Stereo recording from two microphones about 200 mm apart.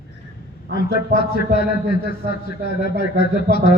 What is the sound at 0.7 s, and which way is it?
A man's voice, 50° left (ahead or behind).